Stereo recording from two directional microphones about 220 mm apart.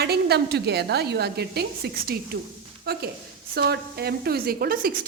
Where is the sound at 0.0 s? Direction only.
50° right (ahead or behind).